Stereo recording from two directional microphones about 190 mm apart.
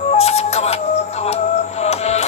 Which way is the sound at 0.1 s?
35° left (ahead or behind).